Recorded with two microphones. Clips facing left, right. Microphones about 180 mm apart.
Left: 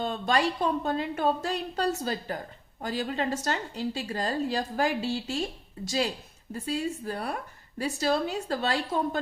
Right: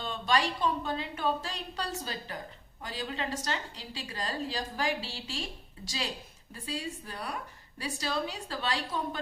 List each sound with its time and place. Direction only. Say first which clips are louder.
0.0 s a woman's voice: left 4 dB; 50° left (ahead or behind)
6.5 s a woman's voice: left 7 dB; 50° left (ahead or behind)